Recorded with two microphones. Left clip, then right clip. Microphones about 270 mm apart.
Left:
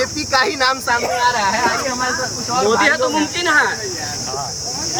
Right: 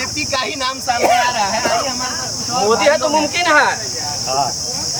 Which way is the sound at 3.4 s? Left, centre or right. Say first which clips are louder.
Right 2 dB; centre.